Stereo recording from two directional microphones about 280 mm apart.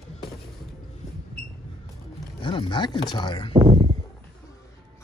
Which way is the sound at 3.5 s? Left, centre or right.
Centre.